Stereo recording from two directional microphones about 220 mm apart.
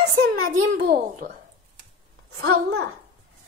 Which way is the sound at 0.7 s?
45° right (ahead or behind).